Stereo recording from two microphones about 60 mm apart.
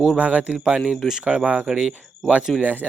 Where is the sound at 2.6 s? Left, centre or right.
Right.